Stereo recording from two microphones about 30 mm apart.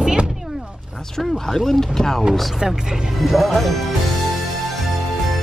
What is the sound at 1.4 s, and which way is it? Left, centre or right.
Speech, centre.